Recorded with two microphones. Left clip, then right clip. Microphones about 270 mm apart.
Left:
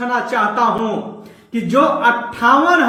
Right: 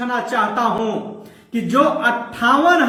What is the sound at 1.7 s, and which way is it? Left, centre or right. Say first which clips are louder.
A man's voice: left 3 dB; centre.